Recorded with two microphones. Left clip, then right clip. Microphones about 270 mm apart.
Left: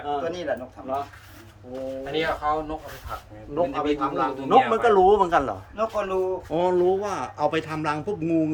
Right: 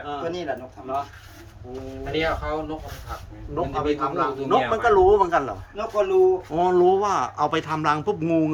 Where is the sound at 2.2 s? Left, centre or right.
Left.